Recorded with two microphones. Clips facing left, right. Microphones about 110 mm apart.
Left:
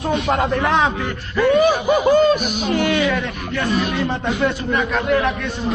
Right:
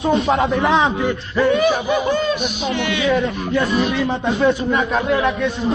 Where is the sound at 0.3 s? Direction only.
Centre (ahead or behind).